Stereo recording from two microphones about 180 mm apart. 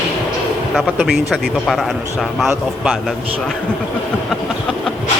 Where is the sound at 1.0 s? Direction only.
Centre (ahead or behind).